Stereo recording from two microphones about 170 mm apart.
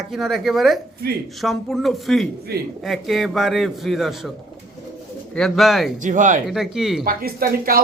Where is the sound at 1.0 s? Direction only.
65° right (ahead or behind).